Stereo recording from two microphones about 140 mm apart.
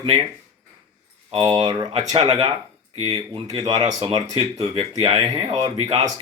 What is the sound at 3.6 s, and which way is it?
Speech, 25° right (ahead or behind).